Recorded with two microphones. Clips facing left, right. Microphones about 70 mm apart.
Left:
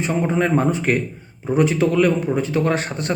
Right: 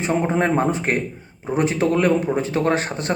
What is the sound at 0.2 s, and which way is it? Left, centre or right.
A man's voice, right.